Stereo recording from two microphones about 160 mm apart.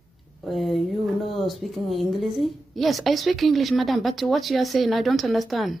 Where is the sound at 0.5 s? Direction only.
Centre (ahead or behind).